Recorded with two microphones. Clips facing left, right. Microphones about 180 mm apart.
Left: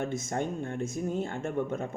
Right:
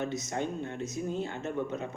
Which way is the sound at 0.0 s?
50° left (ahead or behind).